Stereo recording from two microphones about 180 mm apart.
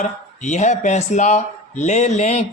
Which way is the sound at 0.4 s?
40° left (ahead or behind).